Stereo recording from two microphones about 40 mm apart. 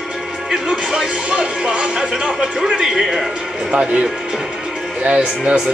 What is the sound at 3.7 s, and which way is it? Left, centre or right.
Speech, right.